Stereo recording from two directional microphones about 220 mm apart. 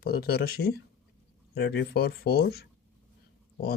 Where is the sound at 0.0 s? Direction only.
45° left (ahead or behind).